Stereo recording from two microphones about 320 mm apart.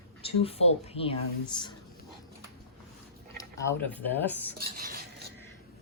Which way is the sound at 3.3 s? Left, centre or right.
Centre.